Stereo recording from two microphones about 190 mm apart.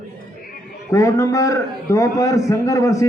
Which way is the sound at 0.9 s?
15° left (ahead or behind).